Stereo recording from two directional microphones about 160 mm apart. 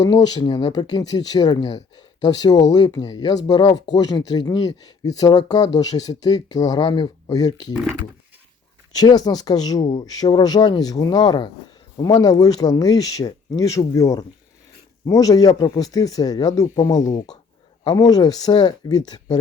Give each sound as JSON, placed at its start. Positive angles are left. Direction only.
{"t": 0.0, "sound": "speech", "side_deg": 25}
{"t": 9.0, "sound": "speech", "side_deg": 25}